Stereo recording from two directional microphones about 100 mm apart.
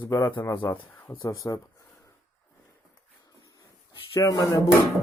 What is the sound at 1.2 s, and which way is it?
Speech, 35° left (ahead or behind).